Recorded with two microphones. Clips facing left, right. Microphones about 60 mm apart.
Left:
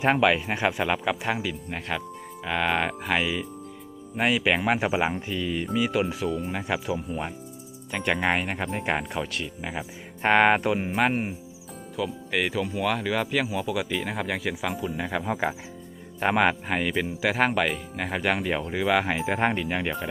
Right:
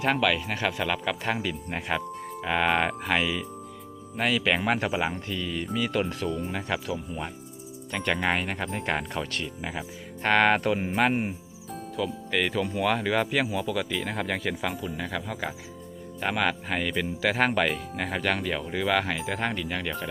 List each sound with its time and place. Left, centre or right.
0.0 s speech: left; by 3.4 s centre
4.2 s speech: centre
10.2 s speech: centre
15.2 s speech: left